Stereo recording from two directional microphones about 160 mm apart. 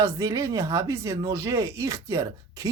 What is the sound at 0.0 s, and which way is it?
Speech, 20° right (ahead or behind).